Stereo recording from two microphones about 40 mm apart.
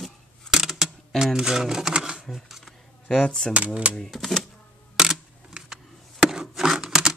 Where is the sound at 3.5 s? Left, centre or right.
Right.